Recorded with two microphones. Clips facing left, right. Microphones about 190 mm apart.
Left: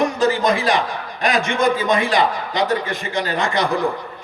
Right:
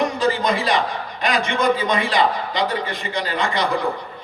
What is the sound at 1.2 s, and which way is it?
A man's voice, 45° left (ahead or behind).